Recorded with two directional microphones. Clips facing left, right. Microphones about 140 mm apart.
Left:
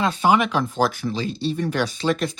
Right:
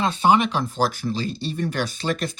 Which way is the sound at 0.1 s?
30° right (ahead or behind).